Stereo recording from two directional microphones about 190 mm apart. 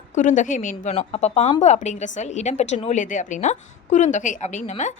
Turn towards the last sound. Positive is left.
turn(degrees=40)  # may be behind; listen again after turning